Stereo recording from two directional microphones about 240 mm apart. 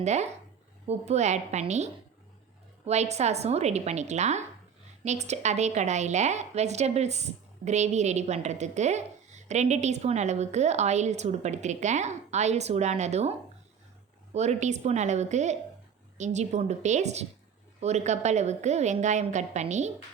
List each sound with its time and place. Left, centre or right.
0.0 s a woman's voice: right
14.3 s a woman's voice: right